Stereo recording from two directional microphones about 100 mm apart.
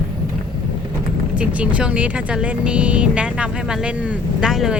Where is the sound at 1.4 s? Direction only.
15° right (ahead or behind).